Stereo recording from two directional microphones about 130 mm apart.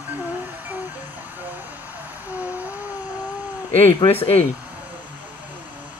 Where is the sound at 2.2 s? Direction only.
10° right (ahead or behind).